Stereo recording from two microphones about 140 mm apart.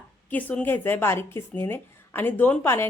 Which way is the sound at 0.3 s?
10° left (ahead or behind).